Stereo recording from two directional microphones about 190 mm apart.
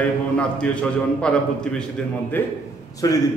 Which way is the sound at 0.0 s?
5° left (ahead or behind).